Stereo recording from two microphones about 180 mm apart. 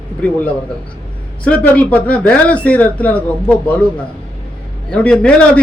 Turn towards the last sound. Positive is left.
turn(degrees=5)  # may be behind; listen again after turning